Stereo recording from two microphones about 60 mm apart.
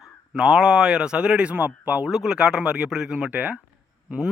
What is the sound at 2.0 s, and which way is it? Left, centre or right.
Speech, centre.